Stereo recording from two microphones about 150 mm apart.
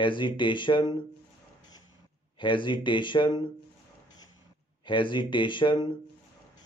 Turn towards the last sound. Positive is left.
turn(degrees=30)  # may be behind; listen again after turning